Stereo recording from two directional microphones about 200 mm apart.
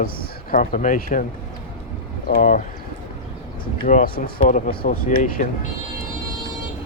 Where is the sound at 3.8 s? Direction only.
40° left (ahead or behind).